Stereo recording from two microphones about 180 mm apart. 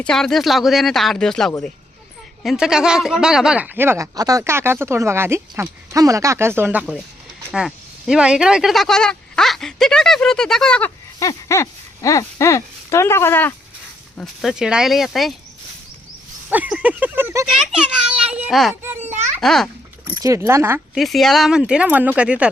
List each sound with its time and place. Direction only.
0.0 s speech: 5° left (ahead or behind)
14.2 s speech: 5° right (ahead or behind)
16.5 s speech: 5° right (ahead or behind)
20.1 s speech: 15° right (ahead or behind)
21.0 s speech: centre (ahead or behind)